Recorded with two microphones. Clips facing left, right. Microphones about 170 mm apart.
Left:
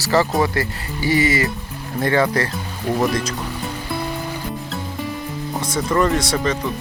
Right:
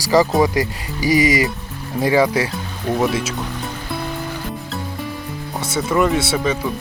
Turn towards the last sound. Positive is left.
turn(degrees=-5)  # may be behind; listen again after turning